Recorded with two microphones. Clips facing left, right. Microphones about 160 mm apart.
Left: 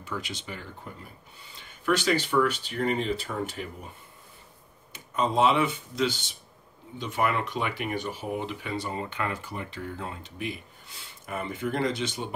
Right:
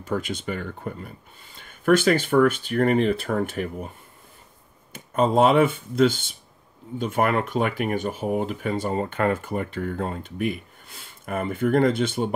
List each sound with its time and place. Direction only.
0.0 s speech: 50° right (ahead or behind)
4.9 s speech: 50° right (ahead or behind)